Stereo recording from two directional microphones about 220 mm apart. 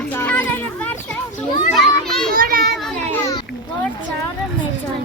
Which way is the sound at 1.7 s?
Centre (ahead or behind).